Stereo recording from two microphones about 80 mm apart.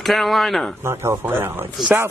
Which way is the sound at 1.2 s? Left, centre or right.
Right.